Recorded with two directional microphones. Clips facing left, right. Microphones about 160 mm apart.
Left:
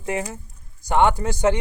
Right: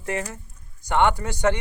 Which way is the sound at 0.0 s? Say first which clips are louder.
Left 2 dB; 15° left (ahead or behind).